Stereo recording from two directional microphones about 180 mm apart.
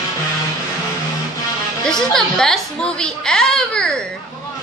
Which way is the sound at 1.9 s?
5° left (ahead or behind).